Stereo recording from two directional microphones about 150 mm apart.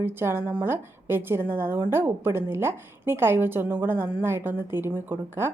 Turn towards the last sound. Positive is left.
turn(degrees=-15)  # may be behind; listen again after turning